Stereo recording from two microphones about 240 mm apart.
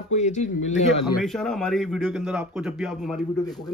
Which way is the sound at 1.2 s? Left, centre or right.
Centre.